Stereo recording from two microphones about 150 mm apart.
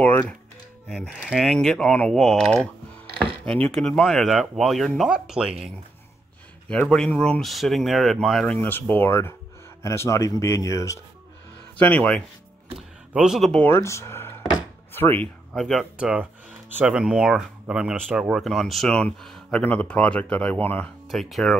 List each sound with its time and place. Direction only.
0.0 s speech: 10° left (ahead or behind)
0.8 s speech: 5° right (ahead or behind)
6.7 s speech: 5° left (ahead or behind)
8.5 s speech: 15° left (ahead or behind)
11.8 s speech: 10° left (ahead or behind)
12.7 s speech: 5° right (ahead or behind)
13.7 s speech: 20° left (ahead or behind)
15.5 s speech: centre (ahead or behind)
21.1 s speech: centre (ahead or behind)